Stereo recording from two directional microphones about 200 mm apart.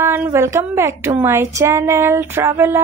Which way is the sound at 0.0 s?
10° right (ahead or behind).